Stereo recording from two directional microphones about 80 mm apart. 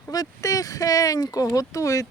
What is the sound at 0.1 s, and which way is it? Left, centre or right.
Speech, left.